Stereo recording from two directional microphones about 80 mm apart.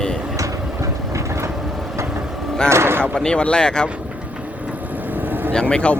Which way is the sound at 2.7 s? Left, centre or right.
Right.